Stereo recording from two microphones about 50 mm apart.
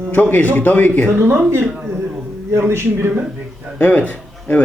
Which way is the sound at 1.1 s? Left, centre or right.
Right.